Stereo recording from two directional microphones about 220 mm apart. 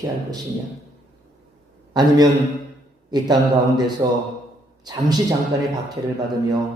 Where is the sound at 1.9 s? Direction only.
20° right (ahead or behind).